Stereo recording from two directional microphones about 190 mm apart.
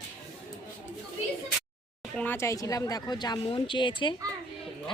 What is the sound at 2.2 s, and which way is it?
A man's voice, 10° left (ahead or behind).